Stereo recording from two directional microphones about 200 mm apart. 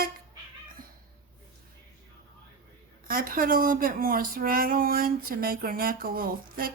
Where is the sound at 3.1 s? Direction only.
45° right (ahead or behind).